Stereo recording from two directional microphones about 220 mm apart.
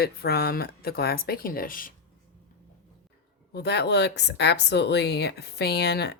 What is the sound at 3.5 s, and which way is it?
Speech, 50° left (ahead or behind).